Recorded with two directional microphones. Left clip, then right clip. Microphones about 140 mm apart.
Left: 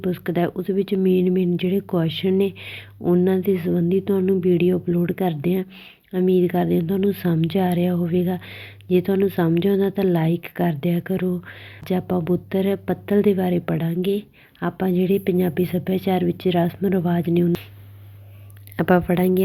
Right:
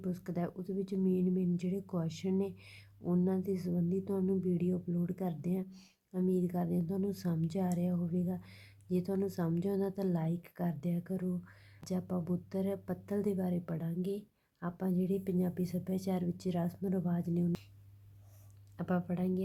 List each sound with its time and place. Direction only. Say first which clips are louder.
0.0 s a woman's voice: left 17 dB; 15° left (ahead or behind)
18.8 s speech: left 19 dB; 25° left (ahead or behind)